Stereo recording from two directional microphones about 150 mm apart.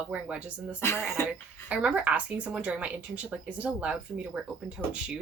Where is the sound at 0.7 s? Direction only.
15° left (ahead or behind).